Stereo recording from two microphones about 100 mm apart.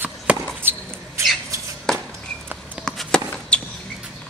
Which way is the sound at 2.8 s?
5° left (ahead or behind).